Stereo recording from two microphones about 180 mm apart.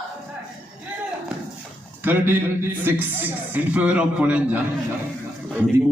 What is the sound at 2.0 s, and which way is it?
Speech, 10° right (ahead or behind).